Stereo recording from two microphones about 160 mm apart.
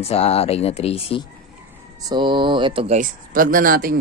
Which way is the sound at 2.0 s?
30° right (ahead or behind).